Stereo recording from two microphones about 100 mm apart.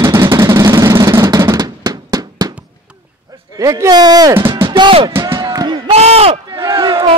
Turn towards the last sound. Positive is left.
turn(degrees=-55)  # may be behind; listen again after turning